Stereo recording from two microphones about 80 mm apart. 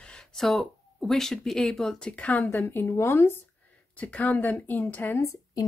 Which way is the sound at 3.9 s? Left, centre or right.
Centre.